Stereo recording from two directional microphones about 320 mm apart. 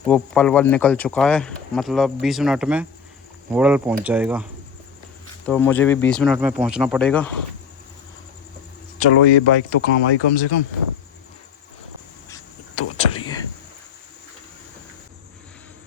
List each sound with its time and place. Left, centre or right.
0.0 s speech: centre
5.5 s speech: centre
9.0 s speech: left
12.7 s vehicle: centre